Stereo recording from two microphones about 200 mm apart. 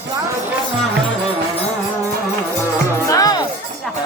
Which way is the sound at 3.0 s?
20° left (ahead or behind).